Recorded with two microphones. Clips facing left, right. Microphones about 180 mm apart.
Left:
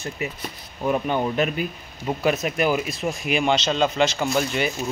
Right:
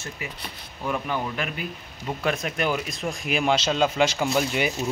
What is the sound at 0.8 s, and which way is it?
Speech, 25° left (ahead or behind).